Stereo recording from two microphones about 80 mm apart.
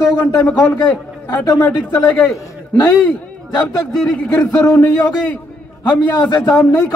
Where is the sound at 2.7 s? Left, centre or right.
Left.